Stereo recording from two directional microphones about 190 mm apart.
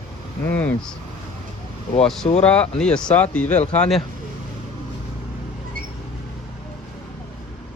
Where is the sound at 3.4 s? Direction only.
35° left (ahead or behind).